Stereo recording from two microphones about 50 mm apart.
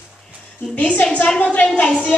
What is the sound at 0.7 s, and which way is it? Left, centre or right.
Speech, left.